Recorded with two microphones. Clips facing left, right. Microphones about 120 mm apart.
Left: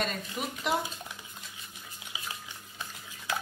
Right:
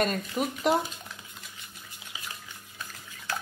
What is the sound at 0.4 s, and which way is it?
Speech, 45° right (ahead or behind).